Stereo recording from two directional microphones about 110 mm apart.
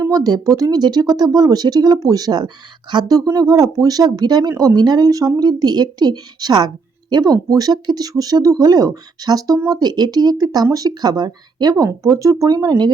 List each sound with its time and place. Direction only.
0.0 s speech: 35° right (ahead or behind)